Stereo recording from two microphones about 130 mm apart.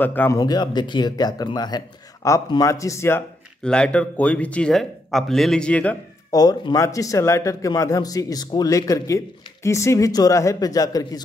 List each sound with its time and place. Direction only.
0.0 s speech: 15° left (ahead or behind)
0.4 s speech: 30° left (ahead or behind)
3.6 s speech: 10° left (ahead or behind)
6.3 s speech: 30° left (ahead or behind)